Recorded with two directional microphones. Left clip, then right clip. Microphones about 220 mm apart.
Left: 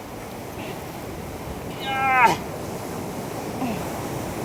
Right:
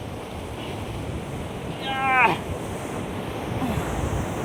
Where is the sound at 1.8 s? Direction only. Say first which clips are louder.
Left 2 dB; 10° left (ahead or behind).